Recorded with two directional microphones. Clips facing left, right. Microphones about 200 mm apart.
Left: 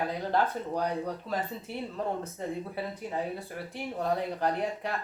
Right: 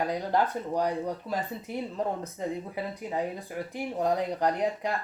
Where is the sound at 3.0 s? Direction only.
15° right (ahead or behind).